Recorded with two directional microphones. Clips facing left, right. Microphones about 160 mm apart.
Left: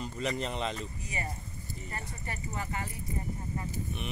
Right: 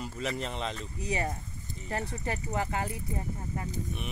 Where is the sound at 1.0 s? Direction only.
75° right (ahead or behind).